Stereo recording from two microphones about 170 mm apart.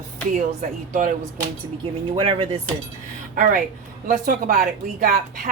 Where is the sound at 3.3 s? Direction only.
50° right (ahead or behind).